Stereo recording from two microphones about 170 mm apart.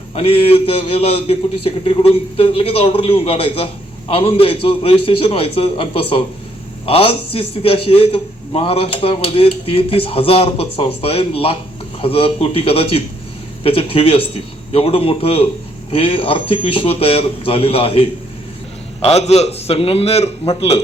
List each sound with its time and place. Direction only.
0.1 s speech: 35° left (ahead or behind)